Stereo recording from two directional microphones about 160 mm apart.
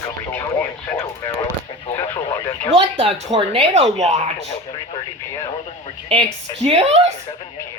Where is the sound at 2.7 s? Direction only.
35° right (ahead or behind).